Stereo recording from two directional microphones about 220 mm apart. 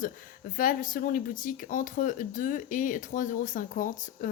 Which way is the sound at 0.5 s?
40° left (ahead or behind).